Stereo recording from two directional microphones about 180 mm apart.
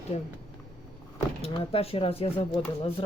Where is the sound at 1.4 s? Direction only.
30° left (ahead or behind).